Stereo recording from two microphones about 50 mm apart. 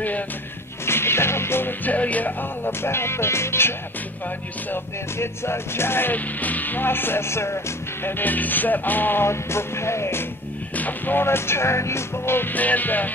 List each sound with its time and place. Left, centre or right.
0.8 s music: left
1.9 s music: left
2.6 s music: left
5.2 s music: left
6.1 s music: left
8.2 s music: left
9.2 s music: left
10.8 s speech: left
11.2 s music: left
12.5 s music: left